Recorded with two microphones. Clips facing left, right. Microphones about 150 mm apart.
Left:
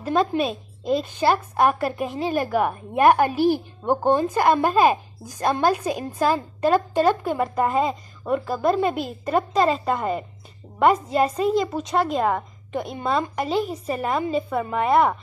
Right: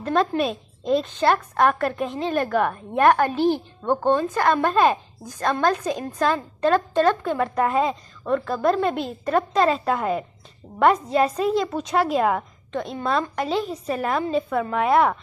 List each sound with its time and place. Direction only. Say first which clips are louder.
0.0 s a woman's voice: even; 5° left (ahead or behind)
8.2 s a woman's voice: right 1 dB; 15° left (ahead or behind)
8.5 s a woman's voice: left 1 dB; 5° left (ahead or behind)